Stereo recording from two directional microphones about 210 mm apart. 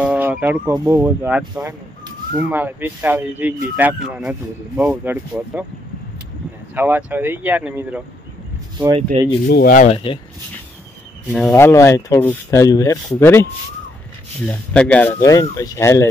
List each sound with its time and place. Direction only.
0.0 s speech: 5° right (ahead or behind)
6.7 s speech: 10° right (ahead or behind)
8.7 s speech: 20° right (ahead or behind)
9.5 s speech: 45° left (ahead or behind)
9.9 s speech: 25° left (ahead or behind)
11.3 s speech: 5° left (ahead or behind)
14.5 s speech: 5° left (ahead or behind)